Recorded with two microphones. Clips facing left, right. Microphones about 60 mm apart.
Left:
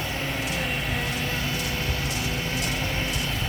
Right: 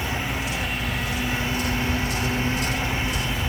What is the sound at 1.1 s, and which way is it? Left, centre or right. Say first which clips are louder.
Vehicle: right 2 dB; centre.